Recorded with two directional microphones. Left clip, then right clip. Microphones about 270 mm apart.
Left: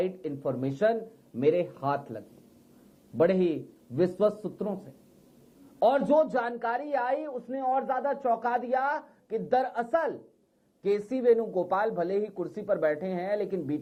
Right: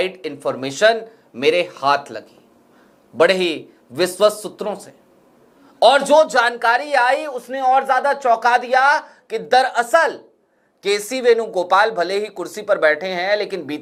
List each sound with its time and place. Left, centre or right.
0.0 s speech: centre
5.9 s speech: centre
11.4 s speech: right
11.7 s speech: centre
12.3 s speech: centre